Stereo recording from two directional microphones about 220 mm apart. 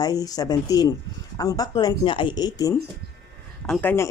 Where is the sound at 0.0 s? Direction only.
15° left (ahead or behind).